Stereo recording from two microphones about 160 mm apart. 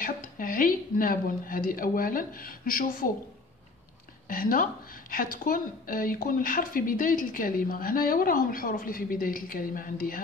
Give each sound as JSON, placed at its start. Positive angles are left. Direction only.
{"t": 0.0, "sound": "a woman's voice", "side_deg": 60}
{"t": 4.3, "sound": "speech", "side_deg": 60}